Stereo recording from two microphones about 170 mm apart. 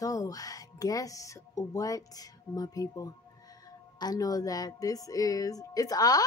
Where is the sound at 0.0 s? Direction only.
20° left (ahead or behind).